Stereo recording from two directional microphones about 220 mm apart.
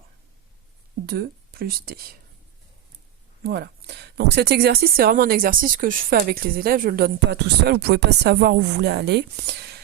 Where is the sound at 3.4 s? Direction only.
50° right (ahead or behind).